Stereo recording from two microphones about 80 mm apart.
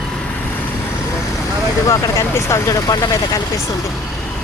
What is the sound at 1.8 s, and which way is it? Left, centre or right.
Speech, left.